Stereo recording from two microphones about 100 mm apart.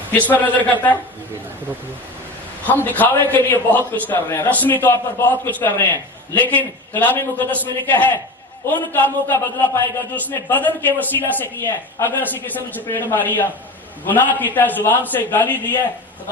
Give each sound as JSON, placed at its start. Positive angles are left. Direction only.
{"t": 0.1, "sound": "a man's voice", "side_deg": 15}
{"t": 3.0, "sound": "a man's voice", "side_deg": 20}